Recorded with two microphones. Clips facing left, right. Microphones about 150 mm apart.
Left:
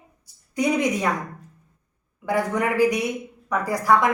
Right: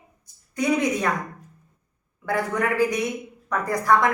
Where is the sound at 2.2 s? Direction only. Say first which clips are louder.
Left 2 dB; 15° left (ahead or behind).